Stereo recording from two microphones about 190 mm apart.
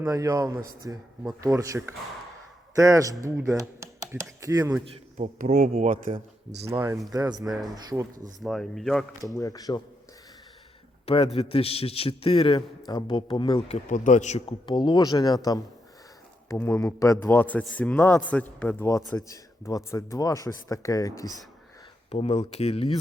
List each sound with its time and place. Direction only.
0.0 s a man's voice: 20° right (ahead or behind)
5.1 s speech: 45° right (ahead or behind)
6.7 s a man's voice: 15° right (ahead or behind)
8.4 s speech: centre (ahead or behind)
9.3 s a man's voice: 15° left (ahead or behind)
11.0 s a man's voice: 30° left (ahead or behind)
16.6 s speech: 15° left (ahead or behind)
22.1 s speech: 35° left (ahead or behind)